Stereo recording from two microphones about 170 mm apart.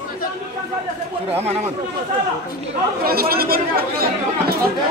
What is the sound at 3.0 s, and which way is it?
Speech, 65° right (ahead or behind).